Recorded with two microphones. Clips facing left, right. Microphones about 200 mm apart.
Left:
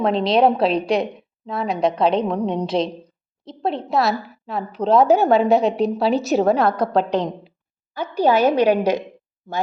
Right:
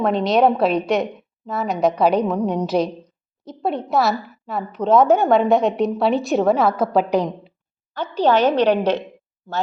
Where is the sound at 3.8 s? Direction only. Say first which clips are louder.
Right 1 dB; centre (ahead or behind).